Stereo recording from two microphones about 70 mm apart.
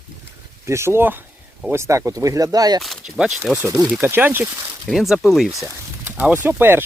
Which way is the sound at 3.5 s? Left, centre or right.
Centre.